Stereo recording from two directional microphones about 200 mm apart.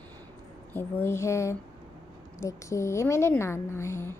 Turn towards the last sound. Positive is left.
turn(degrees=15)  # may be behind; listen again after turning